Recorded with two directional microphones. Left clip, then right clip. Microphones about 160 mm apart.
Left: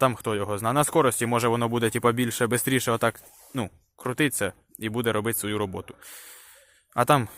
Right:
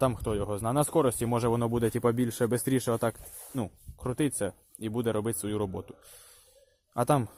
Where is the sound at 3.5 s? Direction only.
5° right (ahead or behind).